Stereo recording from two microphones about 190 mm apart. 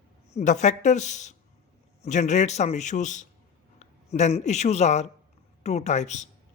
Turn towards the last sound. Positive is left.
turn(degrees=35)  # may be behind; listen again after turning